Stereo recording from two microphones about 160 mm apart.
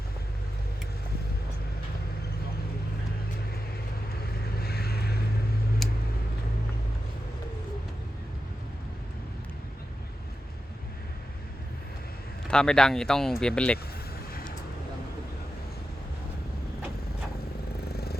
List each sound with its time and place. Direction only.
4.2 s vehicle: 75° left (ahead or behind)
5.8 s vehicle: centre (ahead or behind)
12.5 s speech: 5° left (ahead or behind)
17.8 s vehicle: 75° left (ahead or behind)